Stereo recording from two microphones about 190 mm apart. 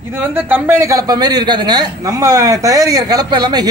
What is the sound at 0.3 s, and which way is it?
A man's voice, 10° right (ahead or behind).